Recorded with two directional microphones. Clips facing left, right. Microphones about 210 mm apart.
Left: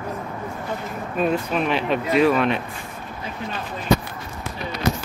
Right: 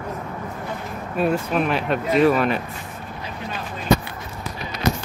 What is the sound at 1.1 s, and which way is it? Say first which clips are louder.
Speech: right 1 dB; 5° right (ahead or behind).